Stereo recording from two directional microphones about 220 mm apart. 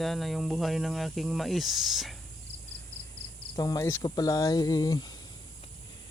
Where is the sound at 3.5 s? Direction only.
15° left (ahead or behind).